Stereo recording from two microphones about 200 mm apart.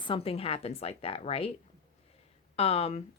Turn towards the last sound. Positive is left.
turn(degrees=30)  # may be behind; listen again after turning